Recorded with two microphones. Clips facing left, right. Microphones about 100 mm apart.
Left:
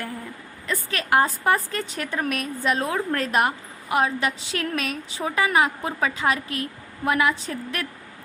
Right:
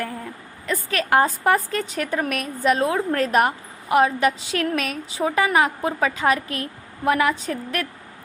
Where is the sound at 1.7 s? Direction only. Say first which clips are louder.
Right 4 dB; 35° left (ahead or behind).